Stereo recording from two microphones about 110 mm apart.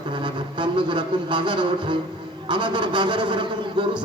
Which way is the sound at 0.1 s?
45° right (ahead or behind).